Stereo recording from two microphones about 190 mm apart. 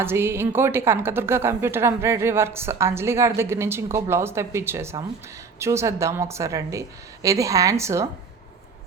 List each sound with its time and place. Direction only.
0.0 s a woman's voice: 10° right (ahead or behind)